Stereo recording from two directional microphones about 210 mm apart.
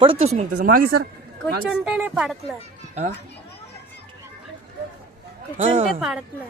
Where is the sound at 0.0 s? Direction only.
30° right (ahead or behind).